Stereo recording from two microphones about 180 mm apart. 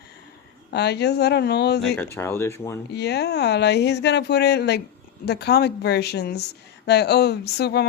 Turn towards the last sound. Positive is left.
turn(degrees=65)  # may be behind; listen again after turning